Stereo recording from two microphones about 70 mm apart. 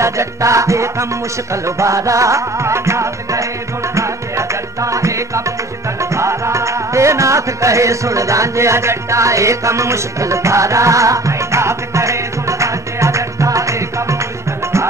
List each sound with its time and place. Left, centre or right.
0.0 s music: right